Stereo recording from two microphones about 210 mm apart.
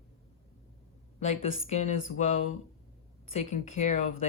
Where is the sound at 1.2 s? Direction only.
30° left (ahead or behind).